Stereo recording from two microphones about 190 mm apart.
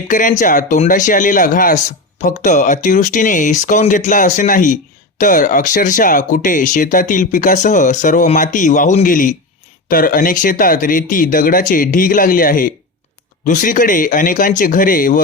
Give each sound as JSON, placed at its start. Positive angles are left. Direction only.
{"t": 0.1, "sound": "speech", "side_deg": 45}